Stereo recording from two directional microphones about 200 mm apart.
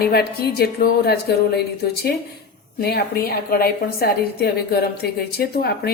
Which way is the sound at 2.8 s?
50° left (ahead or behind).